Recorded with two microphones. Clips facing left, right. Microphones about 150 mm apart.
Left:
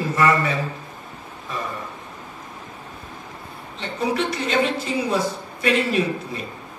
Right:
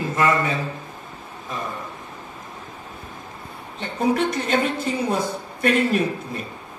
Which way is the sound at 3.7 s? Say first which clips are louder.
Right 2 dB; 50° right (ahead or behind).